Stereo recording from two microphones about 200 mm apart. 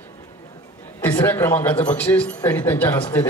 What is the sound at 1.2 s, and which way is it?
A man's voice, 10° left (ahead or behind).